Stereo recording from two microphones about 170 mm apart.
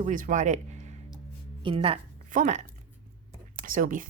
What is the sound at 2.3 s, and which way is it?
Speech, 50° right (ahead or behind).